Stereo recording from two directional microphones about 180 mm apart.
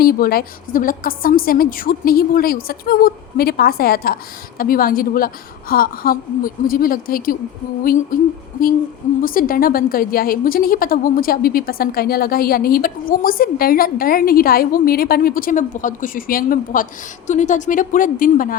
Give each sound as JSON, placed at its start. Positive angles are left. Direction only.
{"t": 0.0, "sound": "a woman's voice", "side_deg": 55}
{"t": 9.2, "sound": "a woman's voice", "side_deg": 50}